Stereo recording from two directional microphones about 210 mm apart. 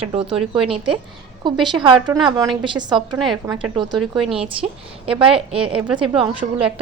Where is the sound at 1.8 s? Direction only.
20° right (ahead or behind).